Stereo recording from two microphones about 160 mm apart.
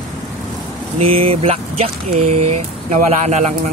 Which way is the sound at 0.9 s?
35° right (ahead or behind).